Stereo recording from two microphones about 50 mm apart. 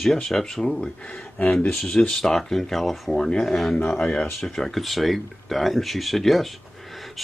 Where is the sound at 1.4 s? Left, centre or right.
Left.